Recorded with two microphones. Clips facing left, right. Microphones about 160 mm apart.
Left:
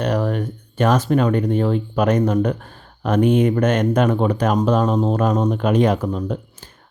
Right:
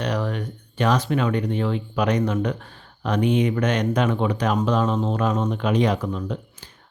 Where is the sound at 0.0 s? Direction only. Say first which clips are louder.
Left 5 dB; 45° left (ahead or behind).